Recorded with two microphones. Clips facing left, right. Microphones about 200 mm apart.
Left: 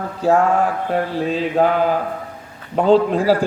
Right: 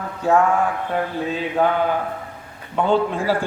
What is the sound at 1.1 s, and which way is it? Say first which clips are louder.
A man's voice: left 4 dB; 35° left (ahead or behind).